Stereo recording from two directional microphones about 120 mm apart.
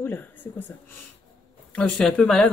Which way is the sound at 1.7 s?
5° left (ahead or behind).